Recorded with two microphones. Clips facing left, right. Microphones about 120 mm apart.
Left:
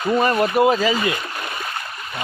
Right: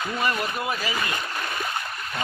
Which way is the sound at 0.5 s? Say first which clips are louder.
Left 12 dB; 90° left.